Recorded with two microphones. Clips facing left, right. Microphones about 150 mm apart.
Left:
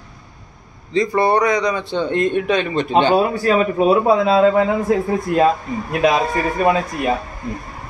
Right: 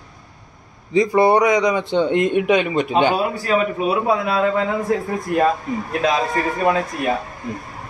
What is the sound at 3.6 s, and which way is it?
A man's voice, 35° left (ahead or behind).